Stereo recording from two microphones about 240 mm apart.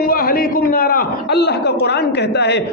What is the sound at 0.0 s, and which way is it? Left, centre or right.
A man's voice, left.